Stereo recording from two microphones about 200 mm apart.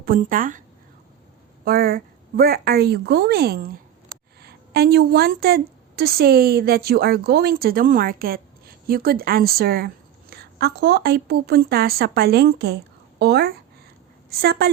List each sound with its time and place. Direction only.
0.0 s a woman's voice: 45° right (ahead or behind)
1.6 s a woman's voice: 45° right (ahead or behind)